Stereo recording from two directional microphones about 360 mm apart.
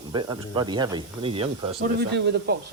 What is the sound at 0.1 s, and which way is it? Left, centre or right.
Speech, centre.